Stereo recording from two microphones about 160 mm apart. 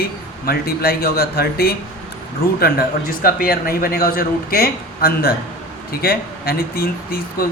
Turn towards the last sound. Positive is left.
turn(degrees=65)  # may be behind; listen again after turning